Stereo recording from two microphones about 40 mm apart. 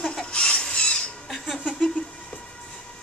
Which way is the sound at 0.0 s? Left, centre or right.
Centre.